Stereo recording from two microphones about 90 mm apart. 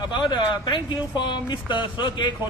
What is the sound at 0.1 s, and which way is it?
Speech, 60° left (ahead or behind).